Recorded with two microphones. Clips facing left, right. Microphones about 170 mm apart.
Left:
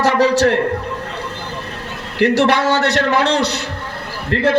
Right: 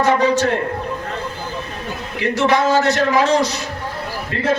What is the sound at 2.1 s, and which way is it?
A man's voice, 70° left (ahead or behind).